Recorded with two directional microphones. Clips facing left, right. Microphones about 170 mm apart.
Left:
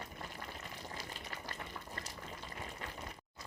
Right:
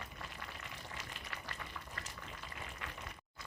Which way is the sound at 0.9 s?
35° left (ahead or behind).